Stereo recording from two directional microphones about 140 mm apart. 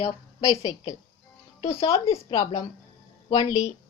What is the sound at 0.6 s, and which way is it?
Speech, 25° left (ahead or behind).